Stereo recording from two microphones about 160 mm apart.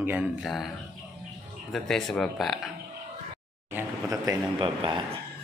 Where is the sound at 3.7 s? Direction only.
20° right (ahead or behind).